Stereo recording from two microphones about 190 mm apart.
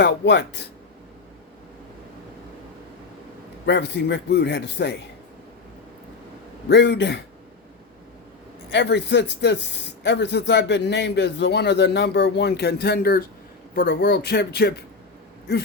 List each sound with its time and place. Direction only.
0.0 s speech: 65° left (ahead or behind)
3.7 s speech: 65° left (ahead or behind)
6.7 s speech: 65° left (ahead or behind)
8.7 s speech: 65° left (ahead or behind)